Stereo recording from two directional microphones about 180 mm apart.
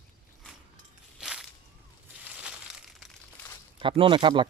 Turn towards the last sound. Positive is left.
turn(degrees=-25)  # may be behind; listen again after turning